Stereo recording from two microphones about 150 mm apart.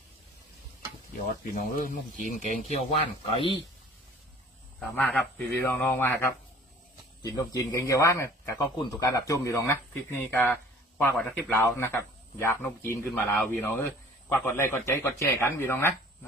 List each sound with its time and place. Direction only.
1.5 s speech: 65° left (ahead or behind)
3.2 s a man's voice: 35° left (ahead or behind)
4.8 s speech: 5° left (ahead or behind)
7.2 s speech: 25° left (ahead or behind)